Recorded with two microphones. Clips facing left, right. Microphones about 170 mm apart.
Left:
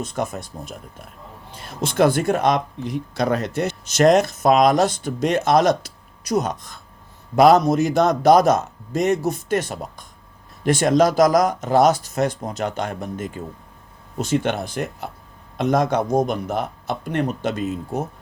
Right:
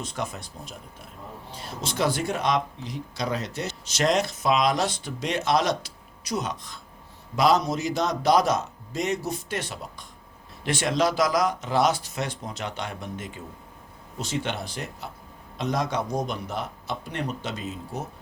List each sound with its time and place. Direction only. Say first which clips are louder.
0.0 s speech: left 6 dB; 50° left (ahead or behind)